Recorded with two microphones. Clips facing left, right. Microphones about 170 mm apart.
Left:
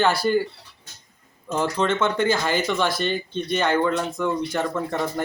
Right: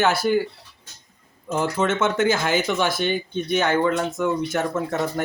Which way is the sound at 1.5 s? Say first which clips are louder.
Even; 10° right (ahead or behind).